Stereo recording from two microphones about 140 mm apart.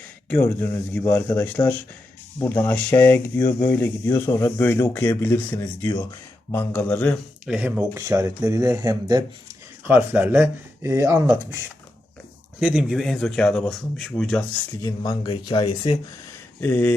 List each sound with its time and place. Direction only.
0.3 s speech: 25° left (ahead or behind)
0.9 s speech: 15° left (ahead or behind)
7.4 s speech: 5° right (ahead or behind)
7.9 s speech: 20° right (ahead or behind)
9.8 s speech: 15° right (ahead or behind)
12.5 s speech: 5° right (ahead or behind)
14.8 s speech: 25° left (ahead or behind)
16.6 s speech: 15° left (ahead or behind)